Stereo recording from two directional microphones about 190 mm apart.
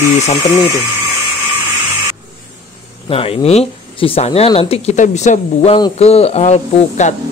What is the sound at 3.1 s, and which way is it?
Speech, 30° left (ahead or behind).